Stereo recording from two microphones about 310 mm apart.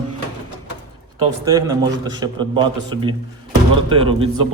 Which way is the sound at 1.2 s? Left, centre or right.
Centre.